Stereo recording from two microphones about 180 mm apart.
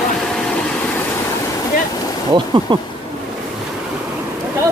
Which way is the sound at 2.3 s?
25° right (ahead or behind).